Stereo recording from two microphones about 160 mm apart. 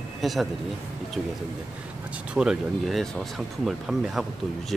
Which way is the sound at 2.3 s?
5° right (ahead or behind).